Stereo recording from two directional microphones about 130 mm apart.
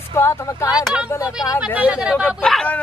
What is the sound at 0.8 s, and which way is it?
Speech, 5° right (ahead or behind).